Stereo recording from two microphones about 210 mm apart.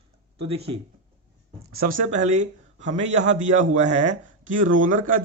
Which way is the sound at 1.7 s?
45° right (ahead or behind).